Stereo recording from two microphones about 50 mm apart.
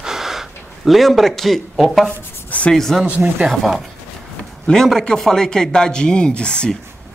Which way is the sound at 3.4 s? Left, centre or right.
Centre.